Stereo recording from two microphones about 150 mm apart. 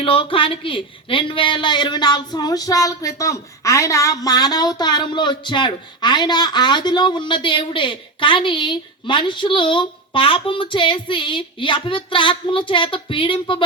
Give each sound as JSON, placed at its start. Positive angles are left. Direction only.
{"t": 0.0, "sound": "a woman's voice", "side_deg": 35}